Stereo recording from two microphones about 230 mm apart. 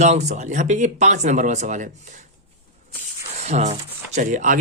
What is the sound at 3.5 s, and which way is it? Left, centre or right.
Speech, right.